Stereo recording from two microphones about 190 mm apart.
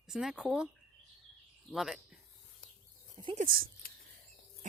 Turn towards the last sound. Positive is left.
turn(degrees=-40)  # may be behind; listen again after turning